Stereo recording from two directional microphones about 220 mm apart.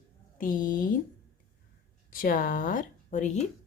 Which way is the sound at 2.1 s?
40° left (ahead or behind).